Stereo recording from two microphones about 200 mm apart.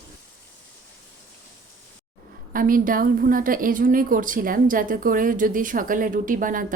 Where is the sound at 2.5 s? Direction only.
45° right (ahead or behind).